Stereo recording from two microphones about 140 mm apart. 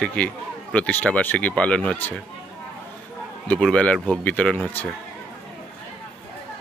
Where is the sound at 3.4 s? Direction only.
5° left (ahead or behind).